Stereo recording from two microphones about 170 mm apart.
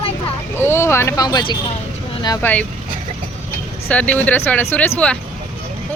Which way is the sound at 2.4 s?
10° left (ahead or behind).